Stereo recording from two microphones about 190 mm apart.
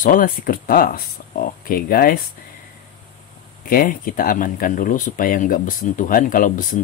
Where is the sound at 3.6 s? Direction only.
50° left (ahead or behind).